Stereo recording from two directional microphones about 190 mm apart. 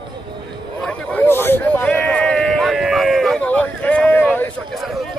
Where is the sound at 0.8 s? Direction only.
5° left (ahead or behind).